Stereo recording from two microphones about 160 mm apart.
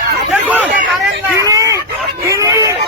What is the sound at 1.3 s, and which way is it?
Speech, 20° right (ahead or behind).